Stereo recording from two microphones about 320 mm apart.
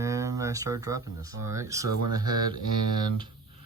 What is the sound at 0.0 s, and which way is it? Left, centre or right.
Speech, centre.